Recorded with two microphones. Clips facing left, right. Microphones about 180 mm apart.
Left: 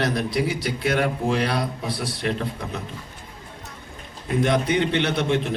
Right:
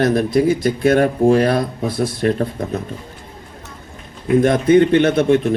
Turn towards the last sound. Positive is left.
turn(degrees=-45)  # may be behind; listen again after turning